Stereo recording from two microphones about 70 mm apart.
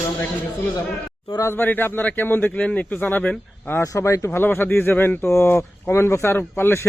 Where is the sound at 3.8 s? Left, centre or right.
Left.